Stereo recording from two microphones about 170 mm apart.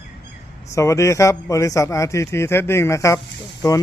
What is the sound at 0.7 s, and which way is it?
A man's voice, 15° left (ahead or behind).